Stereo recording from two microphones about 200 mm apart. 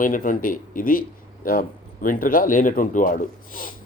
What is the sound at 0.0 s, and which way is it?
A man's voice, 40° left (ahead or behind).